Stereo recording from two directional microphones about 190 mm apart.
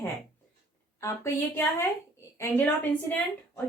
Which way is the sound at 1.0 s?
15° left (ahead or behind).